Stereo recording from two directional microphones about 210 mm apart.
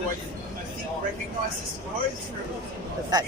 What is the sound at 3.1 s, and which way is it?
Speech, 20° right (ahead or behind).